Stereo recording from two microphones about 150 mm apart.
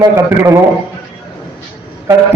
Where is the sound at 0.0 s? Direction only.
20° right (ahead or behind).